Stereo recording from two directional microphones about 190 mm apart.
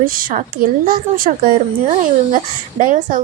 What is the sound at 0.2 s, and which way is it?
Speech, 50° right (ahead or behind).